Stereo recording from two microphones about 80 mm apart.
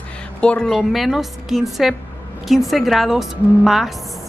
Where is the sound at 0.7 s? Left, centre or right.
Centre.